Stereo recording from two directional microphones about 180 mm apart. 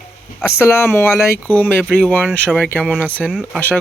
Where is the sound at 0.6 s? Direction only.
15° left (ahead or behind).